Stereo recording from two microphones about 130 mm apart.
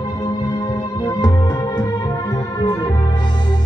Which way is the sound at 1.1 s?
30° left (ahead or behind).